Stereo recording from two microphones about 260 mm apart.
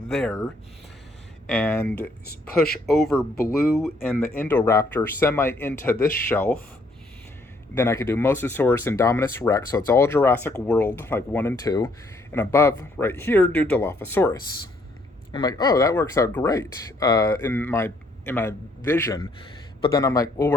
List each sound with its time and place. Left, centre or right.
0.1 s speech: centre
1.5 s speech: centre
2.2 s speech: left
2.8 s speech: centre
3.3 s speech: left
3.8 s speech: centre
7.8 s speech: centre